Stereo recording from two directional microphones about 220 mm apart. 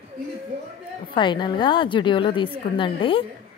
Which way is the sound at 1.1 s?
20° left (ahead or behind).